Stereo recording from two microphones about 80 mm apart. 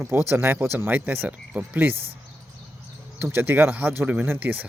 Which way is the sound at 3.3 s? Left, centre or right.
Right.